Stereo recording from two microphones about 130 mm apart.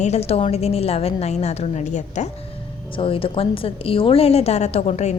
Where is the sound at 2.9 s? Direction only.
45° left (ahead or behind).